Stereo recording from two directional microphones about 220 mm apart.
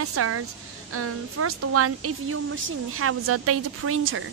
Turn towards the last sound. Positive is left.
turn(degrees=-70)  # may be behind; listen again after turning